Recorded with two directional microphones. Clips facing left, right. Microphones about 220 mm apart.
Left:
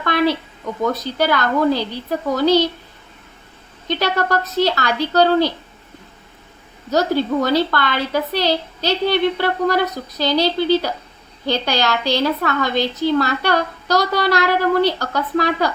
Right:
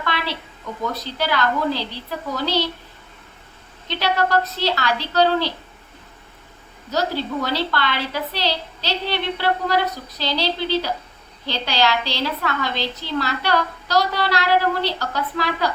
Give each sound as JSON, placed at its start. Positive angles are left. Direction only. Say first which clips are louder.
{"t": 0.0, "sound": "a sound", "louder": "left 9 dB", "side_deg": 45}
{"t": 1.0, "sound": "a woman's voice", "louder": "left 4 dB", "side_deg": 50}
{"t": 3.8, "sound": "a woman's voice", "louder": "left 2 dB", "side_deg": 45}
{"t": 6.9, "sound": "a woman's voice", "louder": "left 6 dB", "side_deg": 50}